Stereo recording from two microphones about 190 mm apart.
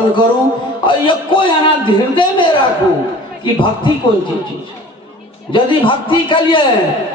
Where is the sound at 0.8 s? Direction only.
25° left (ahead or behind).